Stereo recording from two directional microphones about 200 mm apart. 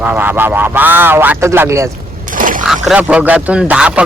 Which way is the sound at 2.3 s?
40° right (ahead or behind).